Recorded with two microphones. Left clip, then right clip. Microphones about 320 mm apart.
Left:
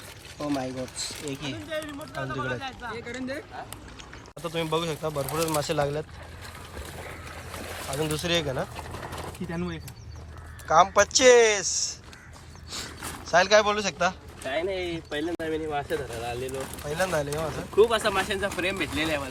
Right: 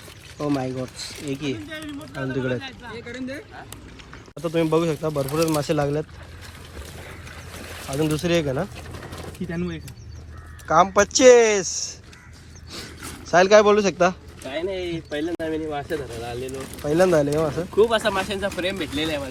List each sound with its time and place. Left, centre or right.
0.5 s speech: centre
4.4 s speech: centre
6.7 s boat: left
7.9 s speech: centre
13.0 s speech: centre